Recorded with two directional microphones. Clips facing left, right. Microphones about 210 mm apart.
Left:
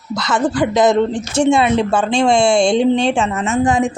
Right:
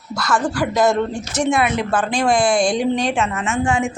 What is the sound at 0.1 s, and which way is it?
Speech, 20° left (ahead or behind).